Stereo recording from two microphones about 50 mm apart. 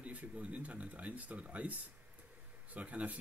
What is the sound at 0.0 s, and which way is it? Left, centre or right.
Speech, right.